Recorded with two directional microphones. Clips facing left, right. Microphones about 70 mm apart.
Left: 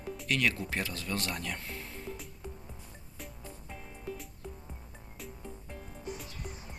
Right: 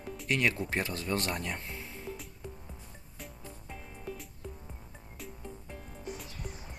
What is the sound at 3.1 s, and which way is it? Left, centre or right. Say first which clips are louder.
Music: even; centre.